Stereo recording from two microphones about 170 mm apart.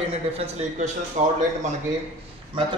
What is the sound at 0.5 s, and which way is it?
Speech, 45° right (ahead or behind).